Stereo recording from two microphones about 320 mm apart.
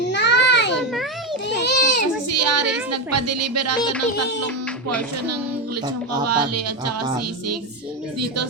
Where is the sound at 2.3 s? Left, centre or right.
Right.